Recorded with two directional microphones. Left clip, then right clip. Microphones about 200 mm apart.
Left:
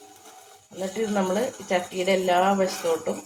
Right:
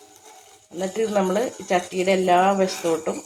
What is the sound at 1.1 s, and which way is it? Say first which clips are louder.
Speech: right 2 dB; 45° right (ahead or behind).